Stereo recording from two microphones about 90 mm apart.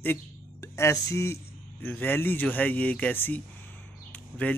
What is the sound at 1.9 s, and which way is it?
Speech, 20° left (ahead or behind).